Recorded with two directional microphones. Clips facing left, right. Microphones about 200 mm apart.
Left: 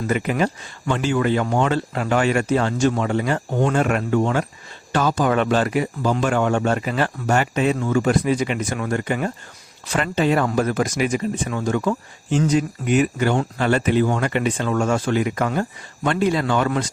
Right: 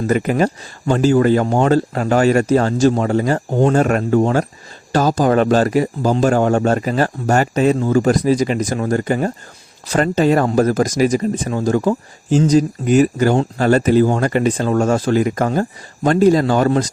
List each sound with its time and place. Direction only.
0.1 s speech: 40° right (ahead or behind)